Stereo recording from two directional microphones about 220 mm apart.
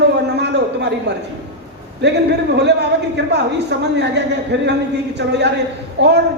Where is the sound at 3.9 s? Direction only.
50° right (ahead or behind).